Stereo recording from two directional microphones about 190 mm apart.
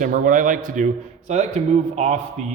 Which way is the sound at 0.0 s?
45° right (ahead or behind).